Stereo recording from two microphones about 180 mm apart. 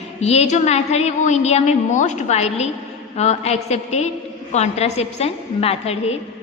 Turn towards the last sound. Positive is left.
turn(degrees=35)  # may be behind; listen again after turning